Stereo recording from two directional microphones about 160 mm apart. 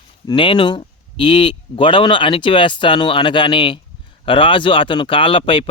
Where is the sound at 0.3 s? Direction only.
30° left (ahead or behind).